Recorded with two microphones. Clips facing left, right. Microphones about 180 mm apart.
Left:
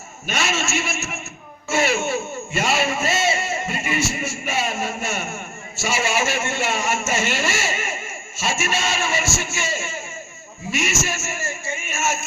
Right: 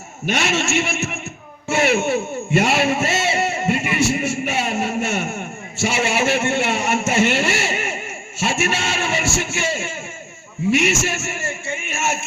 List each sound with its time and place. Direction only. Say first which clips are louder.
0.3 s a man's voice: right 4 dB; 65° right (ahead or behind)
1.6 s a sound: right 3 dB; 65° right (ahead or behind)
5.8 s a man's voice: right 3 dB; 65° right (ahead or behind)